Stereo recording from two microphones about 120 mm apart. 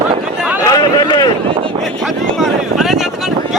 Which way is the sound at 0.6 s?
30° left (ahead or behind).